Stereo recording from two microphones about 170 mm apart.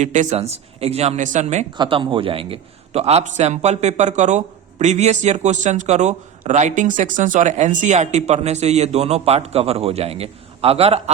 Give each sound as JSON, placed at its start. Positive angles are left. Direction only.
{"t": 0.0, "sound": "a man's voice", "side_deg": -45}
{"t": 1.7, "sound": "a man's voice", "side_deg": -30}